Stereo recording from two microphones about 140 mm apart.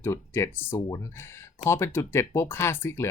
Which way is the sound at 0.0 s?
20° left (ahead or behind).